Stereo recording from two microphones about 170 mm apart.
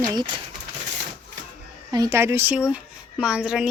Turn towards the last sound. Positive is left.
turn(degrees=-5)  # may be behind; listen again after turning